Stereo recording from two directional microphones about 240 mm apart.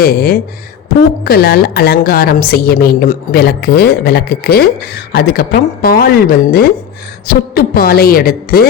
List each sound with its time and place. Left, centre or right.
0.0 s a woman's voice: left